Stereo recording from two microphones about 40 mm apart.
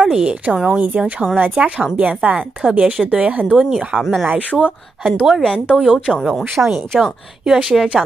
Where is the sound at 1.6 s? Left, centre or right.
Right.